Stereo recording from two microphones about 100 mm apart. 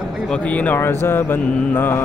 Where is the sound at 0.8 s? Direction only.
25° left (ahead or behind).